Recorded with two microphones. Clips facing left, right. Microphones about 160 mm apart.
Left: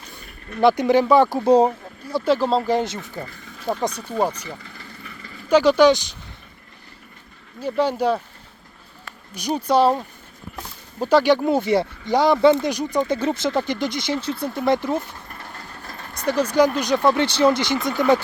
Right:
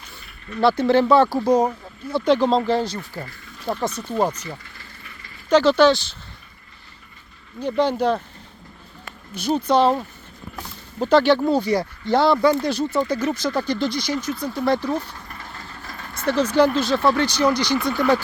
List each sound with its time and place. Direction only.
0.6 s speech: 15° left (ahead or behind)
1.5 s speech: 30° left (ahead or behind)
2.0 s speech: 5° left (ahead or behind)
2.7 s speech: 20° left (ahead or behind)
5.5 s speech: 10° left (ahead or behind)
7.6 s speech: 10° left (ahead or behind)
9.3 s speech: 15° left (ahead or behind)
11.0 s speech: 10° left (ahead or behind)